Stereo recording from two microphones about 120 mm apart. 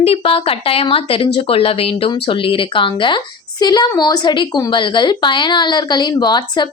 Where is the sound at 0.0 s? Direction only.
55° left (ahead or behind).